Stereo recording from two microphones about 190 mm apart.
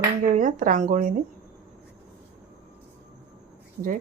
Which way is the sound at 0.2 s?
45° right (ahead or behind).